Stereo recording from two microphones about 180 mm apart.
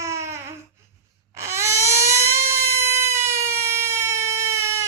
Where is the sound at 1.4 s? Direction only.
15° right (ahead or behind).